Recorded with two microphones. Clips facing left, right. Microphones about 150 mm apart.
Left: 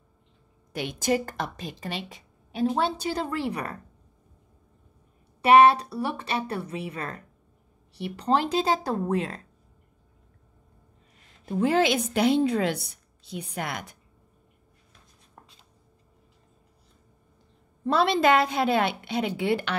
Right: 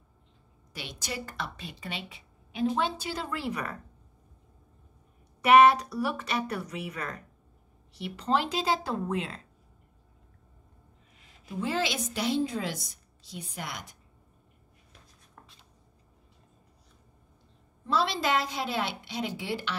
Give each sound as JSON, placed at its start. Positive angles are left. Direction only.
{"t": 0.7, "sound": "a woman's voice", "side_deg": 50}
{"t": 5.4, "sound": "a woman's voice", "side_deg": 30}
{"t": 8.2, "sound": "a woman's voice", "side_deg": 35}
{"t": 11.4, "sound": "a woman's voice", "side_deg": 55}
{"t": 17.8, "sound": "a woman's voice", "side_deg": 60}